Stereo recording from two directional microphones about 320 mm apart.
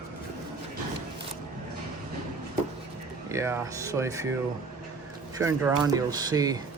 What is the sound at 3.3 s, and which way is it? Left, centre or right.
Speech, centre.